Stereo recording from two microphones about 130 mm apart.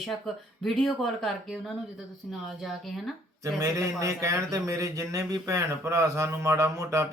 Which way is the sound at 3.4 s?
25° right (ahead or behind).